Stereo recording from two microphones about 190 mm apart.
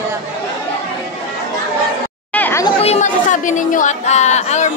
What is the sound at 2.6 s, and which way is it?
Speech, 35° left (ahead or behind).